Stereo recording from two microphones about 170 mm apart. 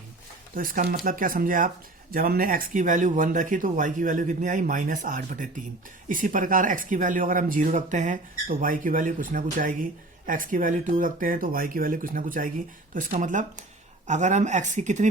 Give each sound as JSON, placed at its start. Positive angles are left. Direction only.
{"t": 0.5, "sound": "speech", "side_deg": -55}